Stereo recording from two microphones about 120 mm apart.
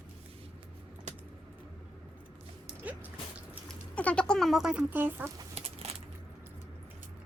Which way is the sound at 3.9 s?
10° left (ahead or behind).